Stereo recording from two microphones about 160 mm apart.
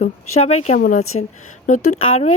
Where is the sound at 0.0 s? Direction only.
45° left (ahead or behind).